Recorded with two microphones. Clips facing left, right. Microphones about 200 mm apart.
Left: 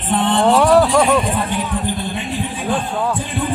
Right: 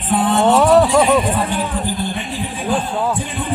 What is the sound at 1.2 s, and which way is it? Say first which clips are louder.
Speech: right 1 dB; 30° right (ahead or behind).